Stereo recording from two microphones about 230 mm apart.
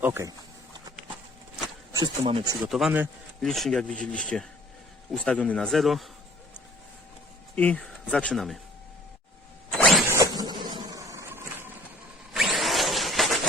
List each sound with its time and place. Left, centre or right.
0.0 s speech: centre
1.9 s speech: centre
2.6 s speech: centre
7.5 s speech: centre
9.7 s zipper: centre
10.1 s a sound: centre
12.3 s a sound: centre